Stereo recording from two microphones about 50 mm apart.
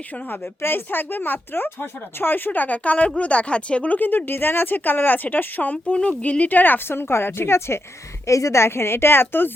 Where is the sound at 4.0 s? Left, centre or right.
Left.